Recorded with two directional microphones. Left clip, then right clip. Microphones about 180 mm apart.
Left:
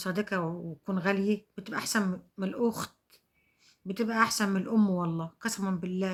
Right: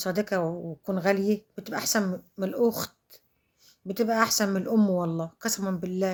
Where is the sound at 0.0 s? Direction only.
15° left (ahead or behind).